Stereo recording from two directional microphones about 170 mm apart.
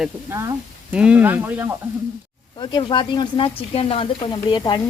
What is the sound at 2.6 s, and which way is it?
Speech, 25° left (ahead or behind).